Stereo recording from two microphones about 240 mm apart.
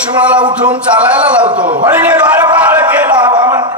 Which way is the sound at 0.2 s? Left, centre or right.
Centre.